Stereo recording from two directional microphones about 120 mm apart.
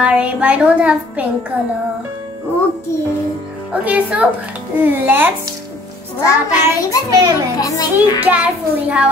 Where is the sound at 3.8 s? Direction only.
10° right (ahead or behind).